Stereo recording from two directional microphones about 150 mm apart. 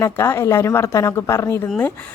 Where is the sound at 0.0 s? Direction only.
20° left (ahead or behind).